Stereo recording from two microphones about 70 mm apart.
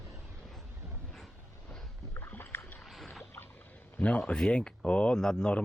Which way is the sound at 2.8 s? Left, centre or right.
Centre.